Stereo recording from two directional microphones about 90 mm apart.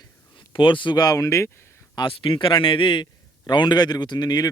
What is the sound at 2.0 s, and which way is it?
A man's voice, 70° left (ahead or behind).